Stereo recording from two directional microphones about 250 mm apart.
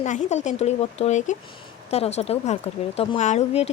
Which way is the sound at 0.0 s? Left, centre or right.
Left.